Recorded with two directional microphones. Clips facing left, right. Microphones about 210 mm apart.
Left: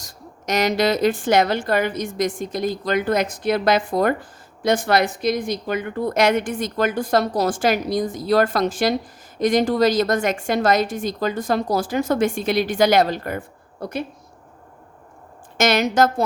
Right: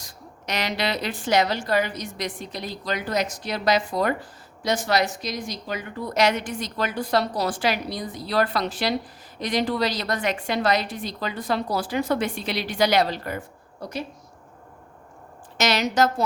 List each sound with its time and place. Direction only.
0.0 s a woman's voice: 45° left (ahead or behind)
15.5 s a woman's voice: 50° left (ahead or behind)